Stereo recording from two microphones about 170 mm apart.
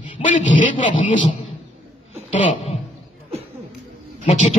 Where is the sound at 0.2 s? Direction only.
50° left (ahead or behind).